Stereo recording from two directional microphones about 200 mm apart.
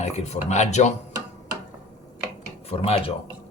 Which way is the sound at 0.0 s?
35° left (ahead or behind).